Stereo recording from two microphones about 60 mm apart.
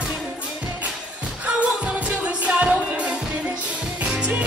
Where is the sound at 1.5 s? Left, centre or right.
Right.